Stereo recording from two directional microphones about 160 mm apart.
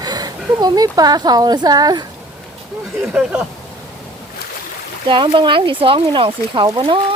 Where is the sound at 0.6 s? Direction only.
25° right (ahead or behind).